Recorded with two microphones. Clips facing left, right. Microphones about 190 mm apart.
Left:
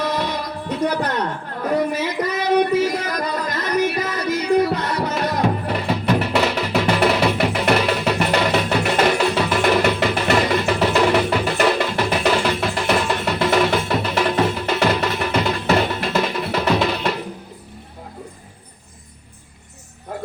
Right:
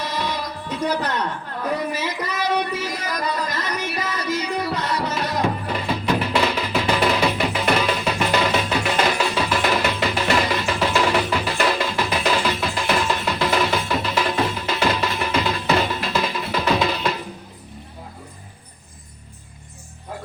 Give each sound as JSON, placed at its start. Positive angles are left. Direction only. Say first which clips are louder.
{"t": 0.0, "sound": "music", "louder": "left 4 dB", "side_deg": 55}